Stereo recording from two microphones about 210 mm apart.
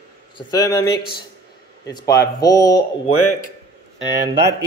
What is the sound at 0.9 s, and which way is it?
Speech, 50° left (ahead or behind).